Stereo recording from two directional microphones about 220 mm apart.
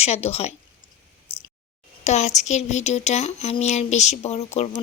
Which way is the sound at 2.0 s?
30° left (ahead or behind).